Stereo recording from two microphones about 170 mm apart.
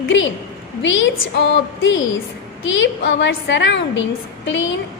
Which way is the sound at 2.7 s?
90° left.